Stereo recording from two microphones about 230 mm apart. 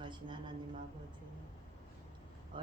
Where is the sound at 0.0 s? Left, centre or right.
Right.